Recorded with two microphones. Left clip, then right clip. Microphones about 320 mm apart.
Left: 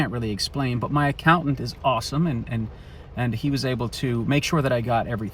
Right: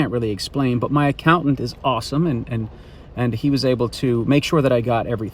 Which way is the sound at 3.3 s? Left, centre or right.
Centre.